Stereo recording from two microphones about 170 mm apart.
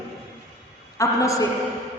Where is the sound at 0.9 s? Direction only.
20° left (ahead or behind).